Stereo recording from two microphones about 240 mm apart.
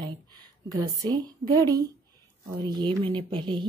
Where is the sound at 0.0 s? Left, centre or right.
Centre.